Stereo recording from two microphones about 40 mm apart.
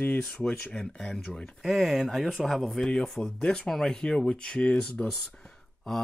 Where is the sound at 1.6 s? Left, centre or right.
Centre.